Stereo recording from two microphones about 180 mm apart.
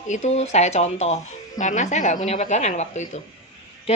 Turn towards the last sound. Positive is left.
turn(degrees=40)  # may be behind; listen again after turning